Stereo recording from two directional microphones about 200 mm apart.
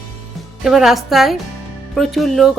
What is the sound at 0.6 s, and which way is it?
Speech, centre (ahead or behind).